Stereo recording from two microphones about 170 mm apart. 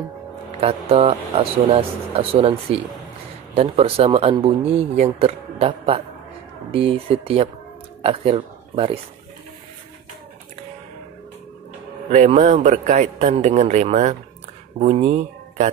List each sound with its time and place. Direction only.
0.6 s speech: 35° right (ahead or behind)
12.1 s speech: 45° right (ahead or behind)